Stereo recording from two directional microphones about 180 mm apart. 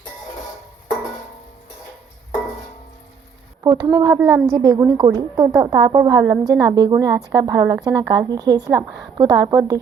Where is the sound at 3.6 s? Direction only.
25° right (ahead or behind).